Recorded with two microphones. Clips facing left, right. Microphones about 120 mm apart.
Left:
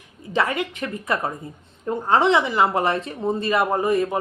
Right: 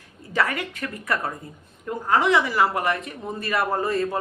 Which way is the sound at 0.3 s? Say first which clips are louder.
Left 2 dB; 20° left (ahead or behind).